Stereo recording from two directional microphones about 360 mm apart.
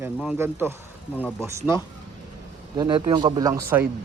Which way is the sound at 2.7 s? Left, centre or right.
Centre.